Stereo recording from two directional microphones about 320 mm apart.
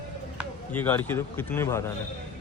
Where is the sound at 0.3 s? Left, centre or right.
Centre.